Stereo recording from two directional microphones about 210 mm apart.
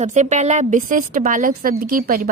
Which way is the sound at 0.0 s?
35° right (ahead or behind).